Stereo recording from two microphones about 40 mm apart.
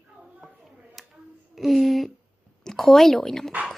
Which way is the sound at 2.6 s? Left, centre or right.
Centre.